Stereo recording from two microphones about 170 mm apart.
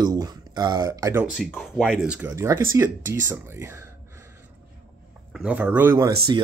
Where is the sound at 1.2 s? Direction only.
5° right (ahead or behind).